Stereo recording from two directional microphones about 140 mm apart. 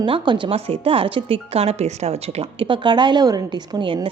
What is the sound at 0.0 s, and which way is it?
Speech, 35° right (ahead or behind).